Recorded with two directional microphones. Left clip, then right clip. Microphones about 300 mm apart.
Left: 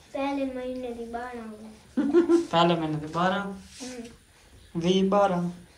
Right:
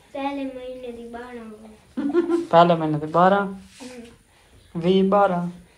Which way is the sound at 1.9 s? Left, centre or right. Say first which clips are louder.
Even; left.